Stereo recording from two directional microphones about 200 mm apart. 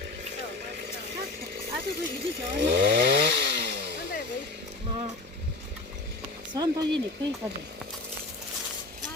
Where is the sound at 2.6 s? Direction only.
55° right (ahead or behind).